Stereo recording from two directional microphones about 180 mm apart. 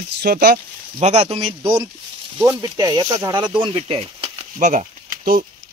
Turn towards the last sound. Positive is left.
turn(degrees=-50)  # may be behind; listen again after turning